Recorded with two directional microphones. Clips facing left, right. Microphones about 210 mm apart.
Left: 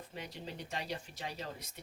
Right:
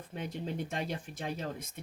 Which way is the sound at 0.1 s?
50° right (ahead or behind).